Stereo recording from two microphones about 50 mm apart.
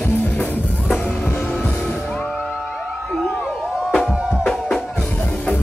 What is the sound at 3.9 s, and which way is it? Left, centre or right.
Music, centre.